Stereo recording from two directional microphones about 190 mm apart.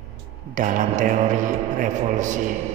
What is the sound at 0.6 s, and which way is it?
A man's voice, 40° right (ahead or behind).